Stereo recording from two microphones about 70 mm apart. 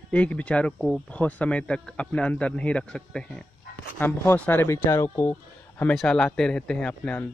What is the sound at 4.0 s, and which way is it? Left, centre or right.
Speech, left.